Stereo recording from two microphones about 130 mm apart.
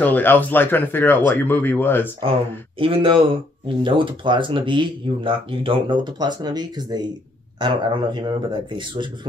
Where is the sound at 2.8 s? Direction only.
40° right (ahead or behind).